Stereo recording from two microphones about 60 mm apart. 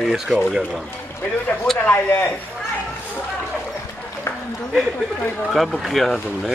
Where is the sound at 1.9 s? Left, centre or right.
Left.